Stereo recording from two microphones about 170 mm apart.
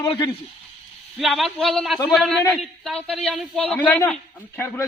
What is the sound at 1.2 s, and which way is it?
A man's voice, centre (ahead or behind).